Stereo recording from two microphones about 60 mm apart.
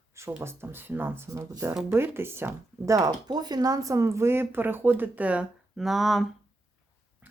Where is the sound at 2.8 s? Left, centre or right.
Right.